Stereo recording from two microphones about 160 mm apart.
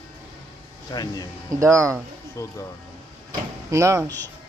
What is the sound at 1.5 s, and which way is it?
Speech, 20° right (ahead or behind).